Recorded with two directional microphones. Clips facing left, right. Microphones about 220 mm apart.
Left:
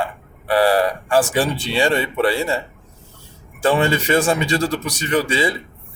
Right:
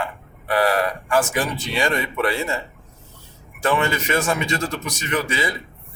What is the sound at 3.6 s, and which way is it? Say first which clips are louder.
Speech: left 4 dB; 30° left (ahead or behind).